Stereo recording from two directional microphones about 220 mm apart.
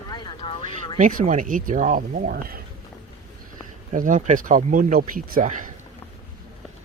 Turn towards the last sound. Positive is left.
turn(degrees=-35)  # may be behind; listen again after turning